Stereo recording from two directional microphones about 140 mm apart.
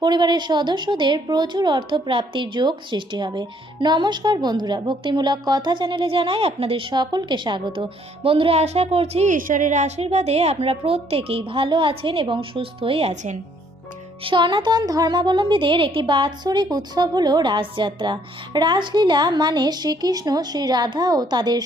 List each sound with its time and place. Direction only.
0.0 s a woman's voice: 30° right (ahead or behind); by 9.3 s 45° right (ahead or behind)
9.3 s a woman's voice: 70° right (ahead or behind); by 13.3 s 45° right (ahead or behind)
14.3 s a woman's voice: 35° right (ahead or behind)